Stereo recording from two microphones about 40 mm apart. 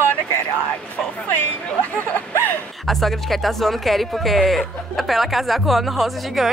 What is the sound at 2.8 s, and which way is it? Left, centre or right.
Speech, centre.